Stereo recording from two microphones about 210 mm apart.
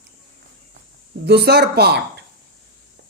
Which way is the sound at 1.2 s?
50° right (ahead or behind).